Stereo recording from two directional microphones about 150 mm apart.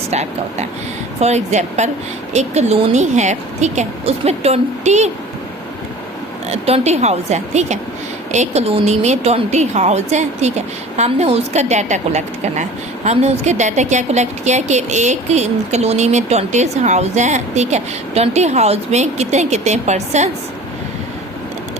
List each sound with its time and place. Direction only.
0.1 s a woman's voice: 50° right (ahead or behind)
6.5 s a woman's voice: 45° right (ahead or behind)